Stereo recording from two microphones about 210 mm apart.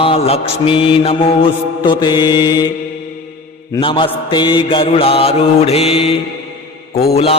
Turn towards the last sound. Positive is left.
turn(degrees=30)  # may be behind; listen again after turning